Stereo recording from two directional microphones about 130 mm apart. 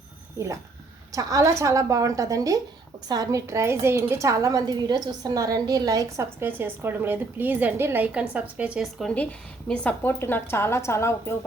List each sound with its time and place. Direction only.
0.3 s a woman's voice: 25° right (ahead or behind); by 9.1 s centre (ahead or behind)
9.6 s a woman's voice: 10° left (ahead or behind)